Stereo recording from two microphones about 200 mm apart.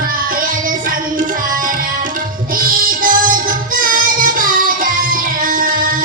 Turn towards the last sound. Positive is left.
turn(degrees=-45)  # may be behind; listen again after turning